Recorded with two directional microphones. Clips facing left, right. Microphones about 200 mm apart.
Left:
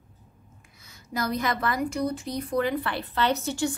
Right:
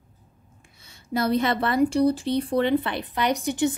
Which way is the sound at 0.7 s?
30° right (ahead or behind).